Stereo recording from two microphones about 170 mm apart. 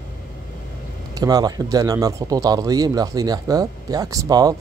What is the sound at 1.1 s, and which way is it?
Speech, 20° right (ahead or behind).